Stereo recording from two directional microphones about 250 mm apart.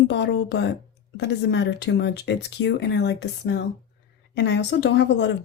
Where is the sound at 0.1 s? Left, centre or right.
Left.